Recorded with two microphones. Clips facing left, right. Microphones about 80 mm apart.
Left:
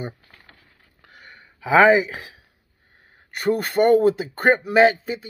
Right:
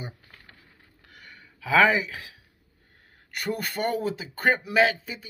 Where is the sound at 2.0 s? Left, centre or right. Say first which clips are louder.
Left 4 dB; left.